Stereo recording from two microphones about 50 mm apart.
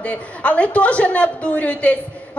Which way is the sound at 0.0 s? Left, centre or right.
Left.